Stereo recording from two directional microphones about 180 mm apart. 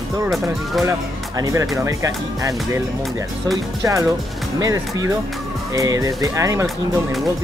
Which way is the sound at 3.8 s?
20° right (ahead or behind).